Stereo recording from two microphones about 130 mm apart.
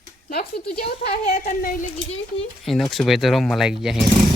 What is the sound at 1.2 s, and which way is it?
Speech, 90° left.